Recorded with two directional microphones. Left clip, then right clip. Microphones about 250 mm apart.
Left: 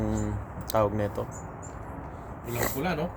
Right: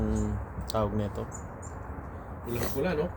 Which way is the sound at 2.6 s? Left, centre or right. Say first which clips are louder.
Left 2 dB; left.